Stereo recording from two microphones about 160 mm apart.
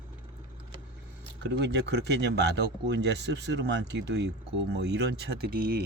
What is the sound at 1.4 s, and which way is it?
Speech, 90° right.